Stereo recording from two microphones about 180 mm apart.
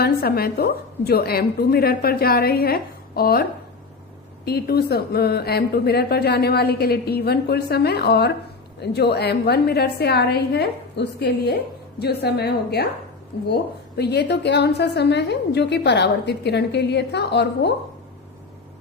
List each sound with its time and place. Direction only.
0.0 s a woman's voice: 60° left (ahead or behind)
4.4 s a woman's voice: 60° left (ahead or behind)